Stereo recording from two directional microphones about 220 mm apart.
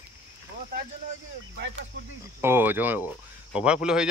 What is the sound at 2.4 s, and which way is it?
Speech, 10° right (ahead or behind).